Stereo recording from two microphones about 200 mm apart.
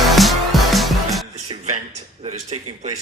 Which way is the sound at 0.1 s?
Centre (ahead or behind).